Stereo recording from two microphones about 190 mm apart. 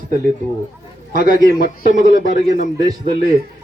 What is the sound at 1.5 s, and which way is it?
Speech, 55° left (ahead or behind).